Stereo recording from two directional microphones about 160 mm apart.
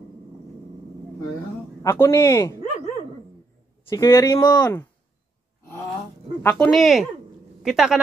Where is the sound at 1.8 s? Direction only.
20° left (ahead or behind).